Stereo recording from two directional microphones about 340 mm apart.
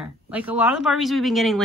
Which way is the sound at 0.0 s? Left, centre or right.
Centre.